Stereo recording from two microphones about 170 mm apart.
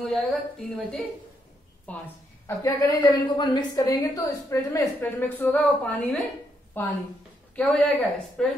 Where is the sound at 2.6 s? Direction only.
20° left (ahead or behind).